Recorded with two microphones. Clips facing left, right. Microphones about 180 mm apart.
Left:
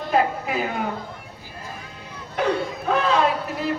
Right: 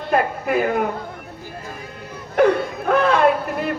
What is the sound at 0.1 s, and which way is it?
Speech, 55° right (ahead or behind).